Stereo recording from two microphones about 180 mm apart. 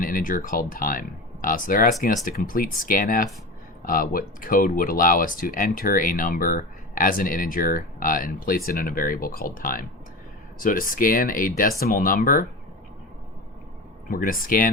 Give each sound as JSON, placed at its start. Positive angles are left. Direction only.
{"t": 0.0, "sound": "speech", "side_deg": 50}
{"t": 14.1, "sound": "speech", "side_deg": 50}